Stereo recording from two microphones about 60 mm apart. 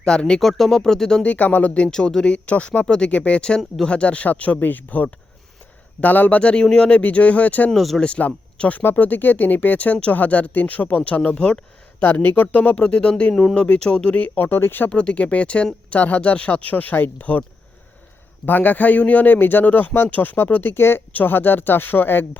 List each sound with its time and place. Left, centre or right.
0.0 s speech: centre
1.2 s speech: left
1.9 s speech: centre
7.0 s speech: left
7.7 s speech: centre
8.0 s speech: centre
8.8 s speech: left
11.9 s speech: left
13.3 s speech: centre
13.6 s speech: centre
14.3 s a man's voice: left
14.8 s speech: centre
18.4 s a man's voice: left